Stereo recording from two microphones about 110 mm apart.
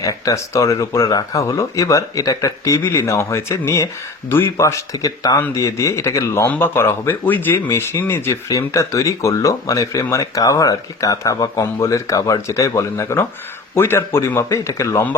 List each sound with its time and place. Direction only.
0.0 s speech: 30° left (ahead or behind)